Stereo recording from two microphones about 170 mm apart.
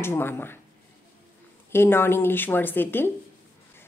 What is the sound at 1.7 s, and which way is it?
Speech, 15° left (ahead or behind).